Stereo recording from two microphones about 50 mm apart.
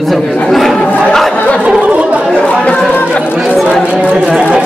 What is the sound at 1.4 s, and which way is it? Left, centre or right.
Speech, left.